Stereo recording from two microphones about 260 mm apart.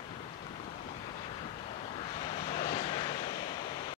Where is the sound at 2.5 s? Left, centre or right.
Left.